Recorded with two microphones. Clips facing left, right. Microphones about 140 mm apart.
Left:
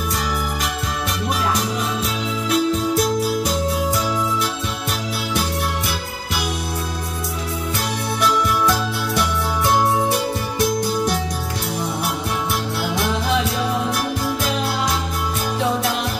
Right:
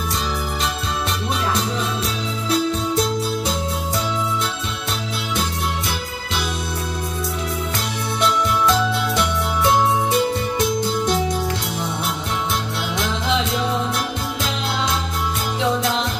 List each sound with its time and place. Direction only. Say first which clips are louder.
2.5 s music: left 1 dB; 25° right (ahead or behind)
8.2 s music: even; 20° right (ahead or behind)